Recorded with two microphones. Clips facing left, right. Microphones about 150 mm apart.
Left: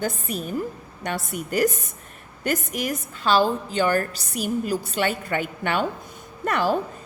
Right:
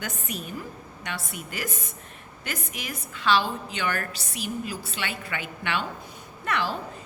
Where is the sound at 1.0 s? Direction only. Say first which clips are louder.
Left 8 dB; 45° left (ahead or behind).